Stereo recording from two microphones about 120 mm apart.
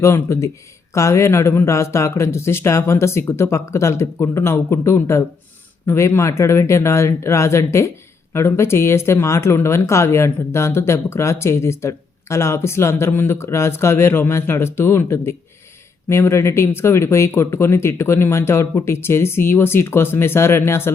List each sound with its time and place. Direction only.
0.0 s speech: 25° left (ahead or behind)